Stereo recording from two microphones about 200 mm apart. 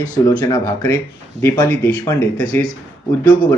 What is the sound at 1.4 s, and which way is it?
Speech, 10° left (ahead or behind).